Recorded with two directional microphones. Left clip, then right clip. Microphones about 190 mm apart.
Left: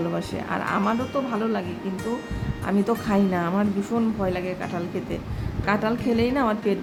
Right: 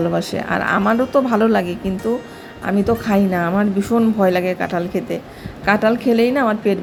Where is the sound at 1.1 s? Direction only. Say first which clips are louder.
Right 11 dB; 30° right (ahead or behind).